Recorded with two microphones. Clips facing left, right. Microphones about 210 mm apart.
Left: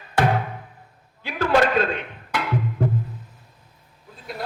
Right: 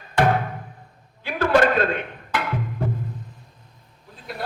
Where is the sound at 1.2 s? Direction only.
55° right (ahead or behind).